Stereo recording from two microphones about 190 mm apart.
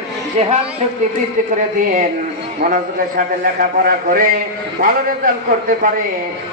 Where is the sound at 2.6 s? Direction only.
50° right (ahead or behind).